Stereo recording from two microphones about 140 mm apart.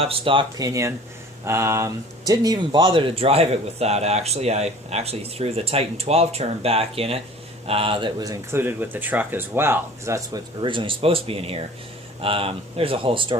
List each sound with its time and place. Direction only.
0.0 s speech: 40° right (ahead or behind)
0.5 s speech: 25° right (ahead or behind)
8.6 s speech: 15° right (ahead or behind)
10.6 s speech: 35° right (ahead or behind)